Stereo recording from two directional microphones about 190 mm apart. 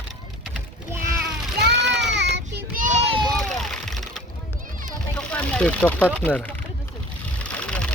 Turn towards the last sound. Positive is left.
turn(degrees=5)  # may be behind; listen again after turning